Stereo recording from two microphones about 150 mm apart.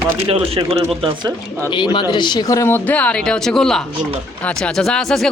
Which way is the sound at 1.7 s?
30° left (ahead or behind).